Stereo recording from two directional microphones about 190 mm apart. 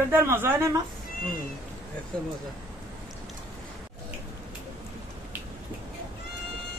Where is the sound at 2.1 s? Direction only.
5° left (ahead or behind).